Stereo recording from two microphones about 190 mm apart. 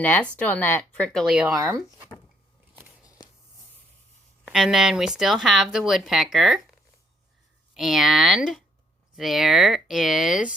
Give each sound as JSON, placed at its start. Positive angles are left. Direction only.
{"t": 0.0, "sound": "speech", "side_deg": 10}
{"t": 1.5, "sound": "speech", "side_deg": -15}
{"t": 4.4, "sound": "speech", "side_deg": 0}
{"t": 7.7, "sound": "speech", "side_deg": 0}